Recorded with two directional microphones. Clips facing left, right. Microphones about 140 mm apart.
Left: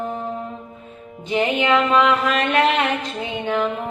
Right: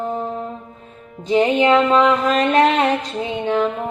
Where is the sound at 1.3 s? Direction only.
35° right (ahead or behind).